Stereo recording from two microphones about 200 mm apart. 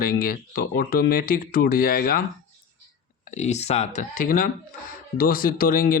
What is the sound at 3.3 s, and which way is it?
Speech, 35° left (ahead or behind).